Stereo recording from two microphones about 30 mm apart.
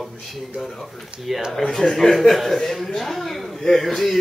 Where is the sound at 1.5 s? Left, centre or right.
Centre.